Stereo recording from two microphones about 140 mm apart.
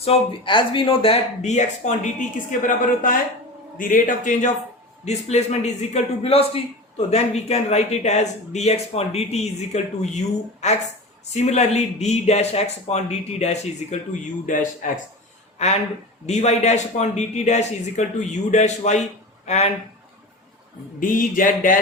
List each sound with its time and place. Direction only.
0.0 s a man's voice: 40° left (ahead or behind)
14.4 s speech: 70° left (ahead or behind)
15.6 s a man's voice: 55° left (ahead or behind)
21.0 s speech: 75° left (ahead or behind)